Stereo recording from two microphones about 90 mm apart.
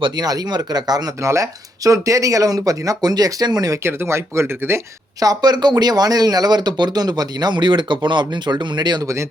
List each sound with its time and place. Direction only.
0.0 s speech: 45° right (ahead or behind)
1.2 s speech: 35° right (ahead or behind)
3.8 s speech: 30° right (ahead or behind)
5.2 s speech: 45° right (ahead or behind)